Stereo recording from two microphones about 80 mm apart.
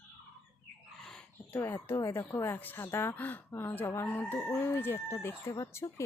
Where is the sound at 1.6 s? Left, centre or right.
Left.